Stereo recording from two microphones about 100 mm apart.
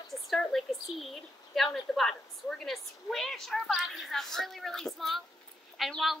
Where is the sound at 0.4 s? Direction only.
5° left (ahead or behind).